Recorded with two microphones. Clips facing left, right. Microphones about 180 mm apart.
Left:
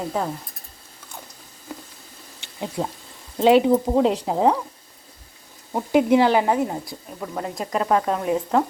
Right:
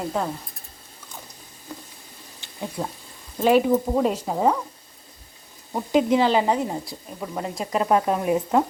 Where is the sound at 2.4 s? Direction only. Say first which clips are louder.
Left 3 dB; 20° left (ahead or behind).